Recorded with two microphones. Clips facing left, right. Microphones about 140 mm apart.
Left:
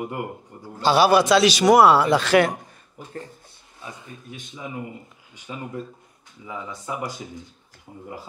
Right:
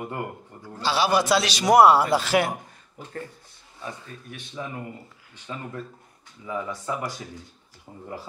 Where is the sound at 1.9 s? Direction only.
70° left (ahead or behind).